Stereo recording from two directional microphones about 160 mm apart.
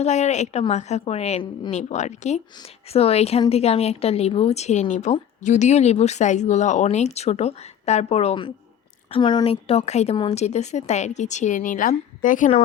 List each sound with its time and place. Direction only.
0.0 s speech: 45° left (ahead or behind)